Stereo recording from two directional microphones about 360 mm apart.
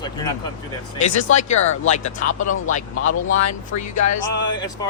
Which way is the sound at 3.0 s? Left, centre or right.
Left.